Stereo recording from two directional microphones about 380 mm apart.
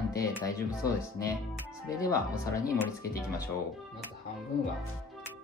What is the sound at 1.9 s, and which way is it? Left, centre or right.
Speech, centre.